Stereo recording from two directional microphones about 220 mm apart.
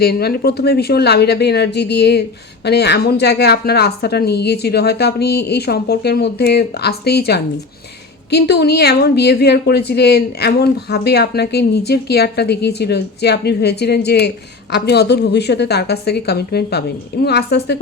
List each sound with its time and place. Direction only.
0.0 s a woman's voice: 45° left (ahead or behind)